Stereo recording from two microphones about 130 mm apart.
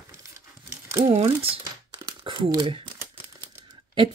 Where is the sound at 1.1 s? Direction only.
50° right (ahead or behind).